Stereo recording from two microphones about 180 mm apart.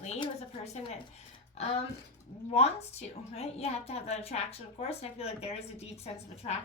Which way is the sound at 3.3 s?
35° left (ahead or behind).